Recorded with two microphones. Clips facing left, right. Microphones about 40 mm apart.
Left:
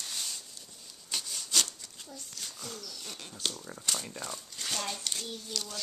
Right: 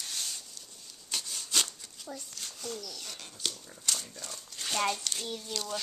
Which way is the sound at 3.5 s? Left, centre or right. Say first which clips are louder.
Left 4 dB; left.